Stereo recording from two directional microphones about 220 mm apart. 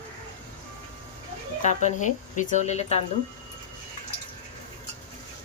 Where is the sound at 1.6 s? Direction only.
35° left (ahead or behind).